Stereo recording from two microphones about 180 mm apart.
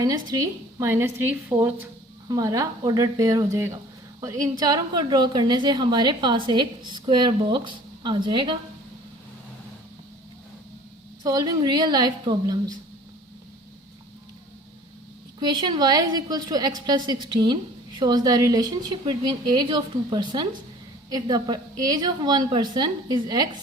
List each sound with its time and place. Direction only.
0.0 s a woman's voice: 20° right (ahead or behind)
11.2 s a woman's voice: 20° right (ahead or behind)
15.4 s a woman's voice: 25° right (ahead or behind)